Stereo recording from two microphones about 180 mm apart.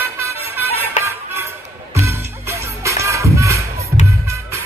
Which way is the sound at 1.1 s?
15° right (ahead or behind).